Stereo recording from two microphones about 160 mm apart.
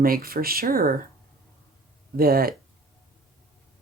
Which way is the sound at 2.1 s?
70° right (ahead or behind).